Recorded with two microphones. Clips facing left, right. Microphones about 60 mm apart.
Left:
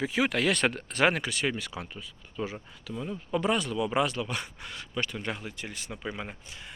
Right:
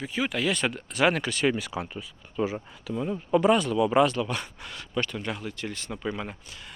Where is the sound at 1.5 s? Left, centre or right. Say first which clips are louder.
Right 6 dB; centre.